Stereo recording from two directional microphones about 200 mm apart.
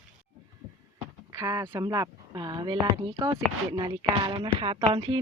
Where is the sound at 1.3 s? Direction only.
15° right (ahead or behind).